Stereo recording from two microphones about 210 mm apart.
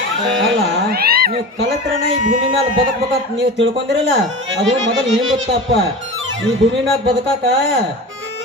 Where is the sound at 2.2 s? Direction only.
40° right (ahead or behind).